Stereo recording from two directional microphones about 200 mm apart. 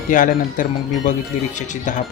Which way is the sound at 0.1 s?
40° left (ahead or behind).